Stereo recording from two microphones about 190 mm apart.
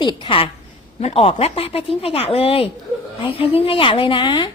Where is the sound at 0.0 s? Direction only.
25° left (ahead or behind).